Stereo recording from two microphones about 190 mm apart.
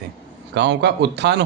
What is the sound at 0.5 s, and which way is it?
Speech, 65° right (ahead or behind).